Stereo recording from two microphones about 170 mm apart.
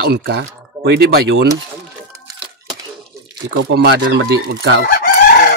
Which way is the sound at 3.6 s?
75° right (ahead or behind).